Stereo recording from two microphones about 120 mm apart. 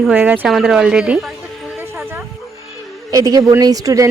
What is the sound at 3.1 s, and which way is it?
A woman's voice, 30° right (ahead or behind).